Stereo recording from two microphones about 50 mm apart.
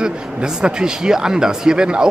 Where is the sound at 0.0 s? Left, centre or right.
Centre.